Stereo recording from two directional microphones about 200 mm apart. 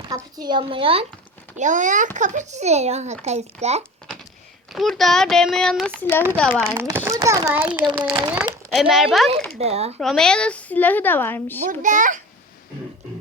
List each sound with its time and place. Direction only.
0.1 s a woman's voice: 20° right (ahead or behind)
1.5 s a child's voice: 40° right (ahead or behind)
4.7 s a child's voice: centre (ahead or behind)
6.7 s a child's voice: 10° right (ahead or behind)
8.4 s speech: centre (ahead or behind)
9.6 s a child's voice: 30° right (ahead or behind)
10.0 s speech: centre (ahead or behind)
11.7 s a child's voice: 40° right (ahead or behind)